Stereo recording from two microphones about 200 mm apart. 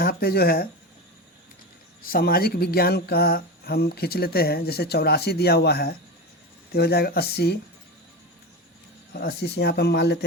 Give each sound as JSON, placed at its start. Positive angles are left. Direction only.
{"t": 0.0, "sound": "speech", "side_deg": 50}
{"t": 2.0, "sound": "speech", "side_deg": 45}
{"t": 9.1, "sound": "speech", "side_deg": 55}